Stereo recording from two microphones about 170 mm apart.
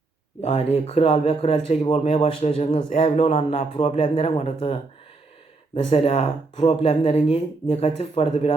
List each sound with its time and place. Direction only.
0.4 s speech: 35° left (ahead or behind)